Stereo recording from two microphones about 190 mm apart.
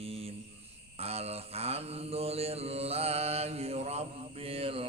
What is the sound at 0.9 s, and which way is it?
Mantra, 30° right (ahead or behind).